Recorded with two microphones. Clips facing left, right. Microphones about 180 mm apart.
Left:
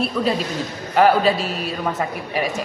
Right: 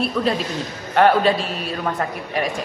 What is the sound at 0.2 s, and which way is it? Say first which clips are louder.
A man's voice: even; 5° left (ahead or behind).